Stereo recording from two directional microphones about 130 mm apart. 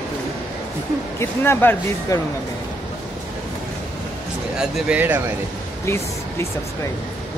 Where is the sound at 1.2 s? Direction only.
20° left (ahead or behind).